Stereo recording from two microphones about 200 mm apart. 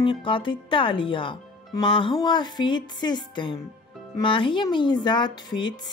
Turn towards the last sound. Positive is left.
turn(degrees=20)  # may be behind; listen again after turning